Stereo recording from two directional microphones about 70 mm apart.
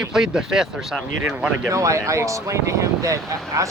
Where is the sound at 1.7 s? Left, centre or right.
Right.